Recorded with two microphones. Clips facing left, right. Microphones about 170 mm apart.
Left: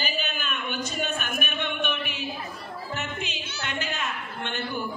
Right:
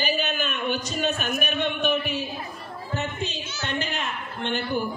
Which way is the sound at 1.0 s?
55° left (ahead or behind).